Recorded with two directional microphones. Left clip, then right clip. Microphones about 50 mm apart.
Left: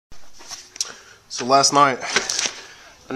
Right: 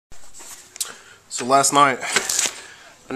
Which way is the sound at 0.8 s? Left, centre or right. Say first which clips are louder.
Left 1 dB; left.